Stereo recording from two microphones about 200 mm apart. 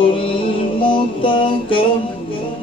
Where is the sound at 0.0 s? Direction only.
25° left (ahead or behind).